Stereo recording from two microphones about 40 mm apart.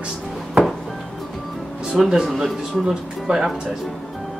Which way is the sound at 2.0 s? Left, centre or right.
Centre.